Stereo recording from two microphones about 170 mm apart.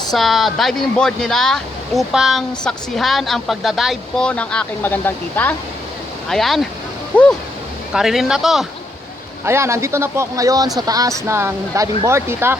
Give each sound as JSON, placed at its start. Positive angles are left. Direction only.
{"t": 0.1, "sound": "speech", "side_deg": 0}
{"t": 9.4, "sound": "speech", "side_deg": -15}